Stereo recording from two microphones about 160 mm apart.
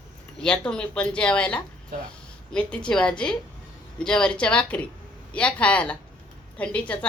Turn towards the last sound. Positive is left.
turn(degrees=10)  # may be behind; listen again after turning